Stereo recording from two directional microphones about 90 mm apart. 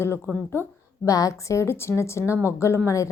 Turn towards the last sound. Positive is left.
turn(degrees=35)  # may be behind; listen again after turning